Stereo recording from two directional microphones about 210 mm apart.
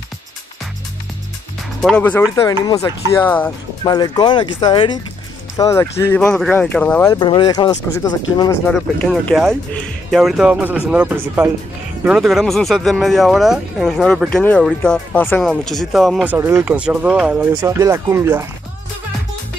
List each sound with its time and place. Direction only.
1.8 s speech: 5° left (ahead or behind)
3.8 s speech: 20° left (ahead or behind)
7.2 s speech: 20° left (ahead or behind)
8.6 s speech: 5° left (ahead or behind)
16.3 s speech: 15° right (ahead or behind)